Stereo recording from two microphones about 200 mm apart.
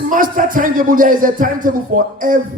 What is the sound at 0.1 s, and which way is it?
A man's voice, 40° right (ahead or behind).